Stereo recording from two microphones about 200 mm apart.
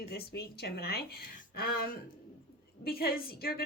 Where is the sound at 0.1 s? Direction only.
55° left (ahead or behind).